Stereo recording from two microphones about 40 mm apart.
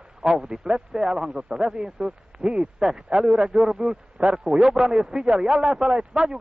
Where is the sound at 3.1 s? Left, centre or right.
Right.